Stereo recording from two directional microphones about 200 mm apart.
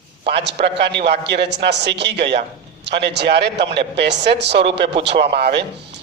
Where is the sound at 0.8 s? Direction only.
60° right (ahead or behind).